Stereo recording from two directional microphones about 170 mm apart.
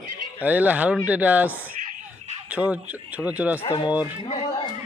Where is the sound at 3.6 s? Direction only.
35° left (ahead or behind).